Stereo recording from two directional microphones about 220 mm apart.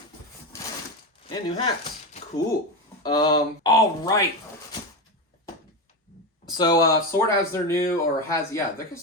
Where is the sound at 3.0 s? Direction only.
20° left (ahead or behind).